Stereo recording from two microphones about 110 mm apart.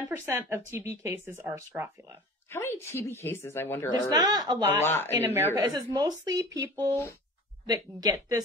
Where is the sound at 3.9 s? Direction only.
35° right (ahead or behind).